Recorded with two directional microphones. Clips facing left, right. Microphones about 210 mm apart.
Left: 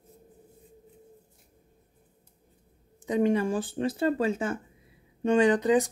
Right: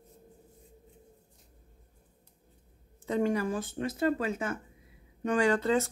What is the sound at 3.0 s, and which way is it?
Speech, 20° left (ahead or behind).